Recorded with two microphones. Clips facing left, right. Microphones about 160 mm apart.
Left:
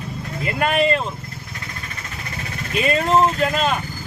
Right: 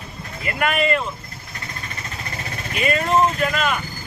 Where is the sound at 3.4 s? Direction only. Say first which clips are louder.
Left 2 dB; 30° left (ahead or behind).